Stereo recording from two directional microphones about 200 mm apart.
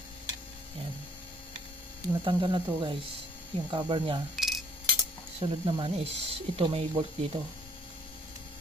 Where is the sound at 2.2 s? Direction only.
25° right (ahead or behind).